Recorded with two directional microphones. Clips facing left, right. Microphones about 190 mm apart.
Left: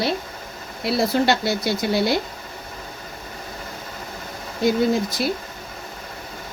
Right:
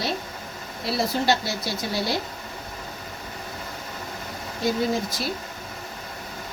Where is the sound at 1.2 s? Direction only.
60° left (ahead or behind).